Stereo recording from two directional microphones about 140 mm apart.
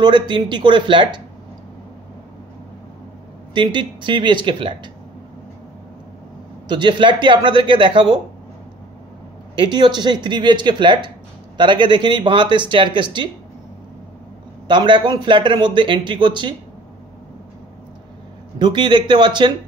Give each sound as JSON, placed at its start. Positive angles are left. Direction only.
{"t": 0.0, "sound": "a man's voice", "side_deg": -35}
{"t": 3.5, "sound": "a man's voice", "side_deg": -35}
{"t": 6.7, "sound": "a man's voice", "side_deg": -35}
{"t": 9.6, "sound": "a man's voice", "side_deg": -30}
{"t": 14.7, "sound": "a man's voice", "side_deg": -35}
{"t": 18.6, "sound": "a man's voice", "side_deg": -35}